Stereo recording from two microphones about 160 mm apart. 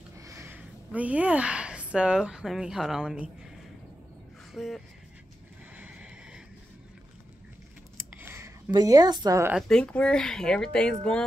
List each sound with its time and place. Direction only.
0.2 s a woman's voice: 20° right (ahead or behind)
4.6 s speech: centre (ahead or behind)
5.8 s horse: 5° right (ahead or behind)
8.2 s a sound: 15° right (ahead or behind)
8.7 s a woman's voice: 25° right (ahead or behind)
9.6 s speech: 5° left (ahead or behind)